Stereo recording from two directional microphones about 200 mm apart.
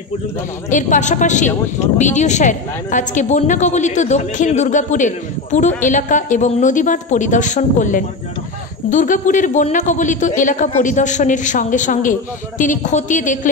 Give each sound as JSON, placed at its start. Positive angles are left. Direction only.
{"t": 0.7, "sound": "a woman's voice", "side_deg": 40}